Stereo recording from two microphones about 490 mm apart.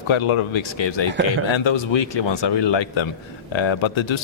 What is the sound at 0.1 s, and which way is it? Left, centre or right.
A man's voice, left.